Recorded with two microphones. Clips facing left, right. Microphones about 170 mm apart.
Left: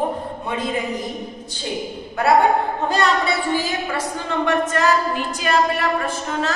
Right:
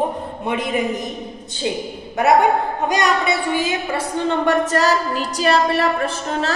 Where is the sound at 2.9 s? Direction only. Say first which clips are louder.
Right 1 dB; 15° right (ahead or behind).